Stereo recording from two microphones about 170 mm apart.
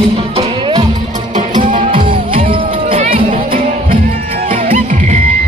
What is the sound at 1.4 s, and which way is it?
Music, 50° right (ahead or behind).